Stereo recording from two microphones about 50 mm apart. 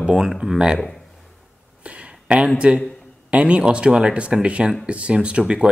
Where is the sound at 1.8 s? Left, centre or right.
Right.